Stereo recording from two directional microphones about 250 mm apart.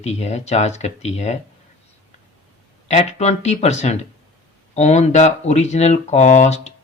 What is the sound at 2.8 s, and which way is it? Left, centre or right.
Speech, left.